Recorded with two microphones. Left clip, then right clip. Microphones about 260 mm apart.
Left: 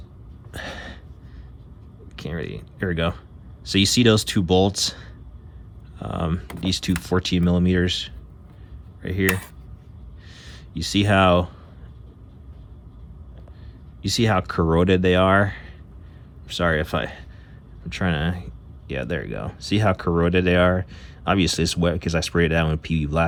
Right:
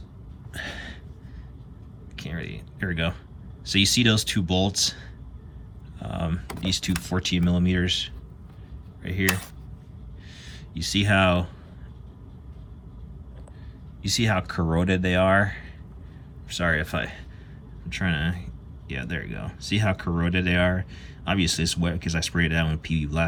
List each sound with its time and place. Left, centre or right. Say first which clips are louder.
0.5 s a sound: left 1 dB; centre
2.1 s speech: left 5 dB; centre
10.3 s speech: left 3 dB; centre
14.0 s speech: left 4 dB; centre